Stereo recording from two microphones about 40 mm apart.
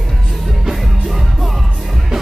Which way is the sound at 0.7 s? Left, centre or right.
Centre.